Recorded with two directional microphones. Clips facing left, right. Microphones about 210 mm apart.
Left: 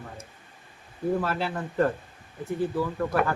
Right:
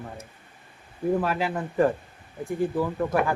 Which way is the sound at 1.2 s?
15° right (ahead or behind).